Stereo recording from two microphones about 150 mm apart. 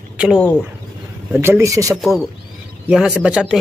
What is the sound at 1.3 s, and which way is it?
Speech, 15° right (ahead or behind).